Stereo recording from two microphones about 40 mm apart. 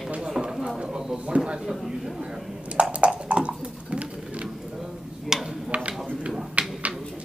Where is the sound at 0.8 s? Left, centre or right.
Right.